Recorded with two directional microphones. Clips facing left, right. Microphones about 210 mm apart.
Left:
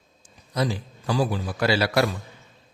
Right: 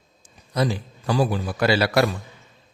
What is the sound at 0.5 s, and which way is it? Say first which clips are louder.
A man's voice: right 2 dB; 55° right (ahead or behind).